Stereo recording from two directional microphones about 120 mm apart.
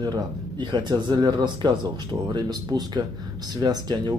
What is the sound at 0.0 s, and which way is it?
Speech, 35° right (ahead or behind).